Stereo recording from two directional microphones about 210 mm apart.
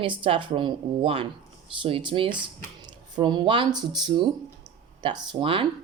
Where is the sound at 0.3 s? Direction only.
25° right (ahead or behind).